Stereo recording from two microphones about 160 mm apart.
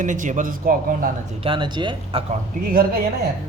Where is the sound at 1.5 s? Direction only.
30° right (ahead or behind).